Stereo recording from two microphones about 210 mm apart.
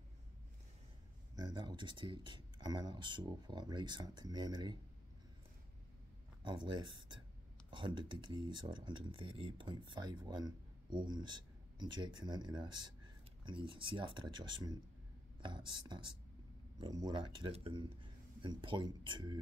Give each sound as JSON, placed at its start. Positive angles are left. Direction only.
{"t": 1.3, "sound": "speech", "side_deg": -20}
{"t": 6.4, "sound": "speech", "side_deg": -20}